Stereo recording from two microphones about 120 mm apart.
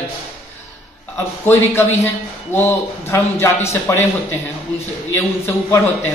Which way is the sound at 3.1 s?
20° left (ahead or behind).